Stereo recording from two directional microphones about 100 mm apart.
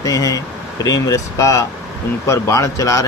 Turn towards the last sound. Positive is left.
turn(degrees=35)  # may be behind; listen again after turning